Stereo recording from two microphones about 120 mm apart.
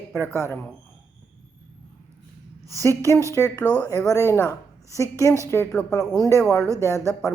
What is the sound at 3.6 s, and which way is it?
Speech, 10° left (ahead or behind).